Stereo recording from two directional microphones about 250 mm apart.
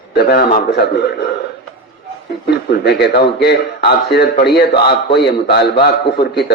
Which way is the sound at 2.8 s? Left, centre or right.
Left.